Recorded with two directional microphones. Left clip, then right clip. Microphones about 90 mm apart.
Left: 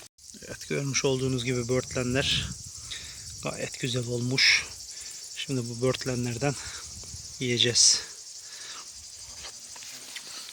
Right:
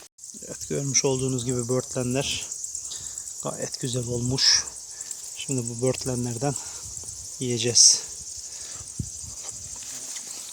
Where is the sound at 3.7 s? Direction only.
10° right (ahead or behind).